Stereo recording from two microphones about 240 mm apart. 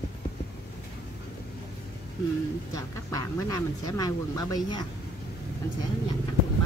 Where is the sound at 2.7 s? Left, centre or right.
Centre.